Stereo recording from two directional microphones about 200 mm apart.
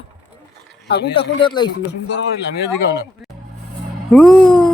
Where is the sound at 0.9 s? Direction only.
55° left (ahead or behind).